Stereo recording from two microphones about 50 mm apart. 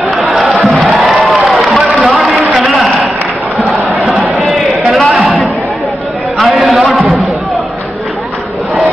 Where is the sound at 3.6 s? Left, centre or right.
Right.